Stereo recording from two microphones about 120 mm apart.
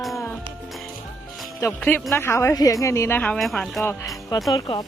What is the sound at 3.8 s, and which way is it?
Speech, 15° left (ahead or behind).